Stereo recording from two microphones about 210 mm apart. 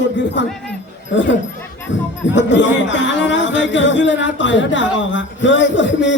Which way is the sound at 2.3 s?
60° left (ahead or behind).